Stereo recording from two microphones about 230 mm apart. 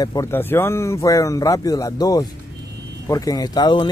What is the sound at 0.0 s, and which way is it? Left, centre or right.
Speech, centre.